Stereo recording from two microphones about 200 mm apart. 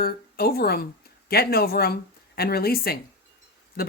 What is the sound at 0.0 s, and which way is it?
A woman's voice, 50° left (ahead or behind).